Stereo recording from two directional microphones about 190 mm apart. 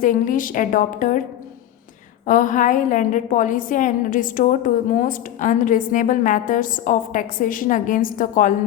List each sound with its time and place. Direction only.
0.0 s a woman's voice: 45° left (ahead or behind)
2.2 s a woman's voice: 45° left (ahead or behind)